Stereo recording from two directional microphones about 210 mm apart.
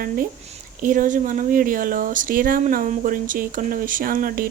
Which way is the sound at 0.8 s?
40° right (ahead or behind).